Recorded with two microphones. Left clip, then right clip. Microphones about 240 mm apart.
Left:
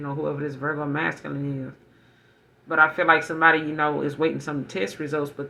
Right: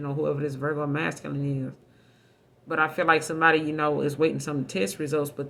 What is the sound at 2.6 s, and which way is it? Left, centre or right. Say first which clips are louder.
Speech: left 4 dB; right.